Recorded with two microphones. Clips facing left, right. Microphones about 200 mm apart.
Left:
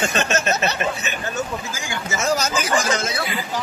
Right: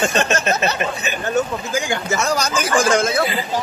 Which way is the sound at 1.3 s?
55° right (ahead or behind).